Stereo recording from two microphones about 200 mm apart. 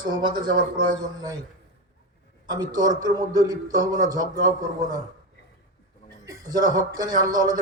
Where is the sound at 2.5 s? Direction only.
20° right (ahead or behind).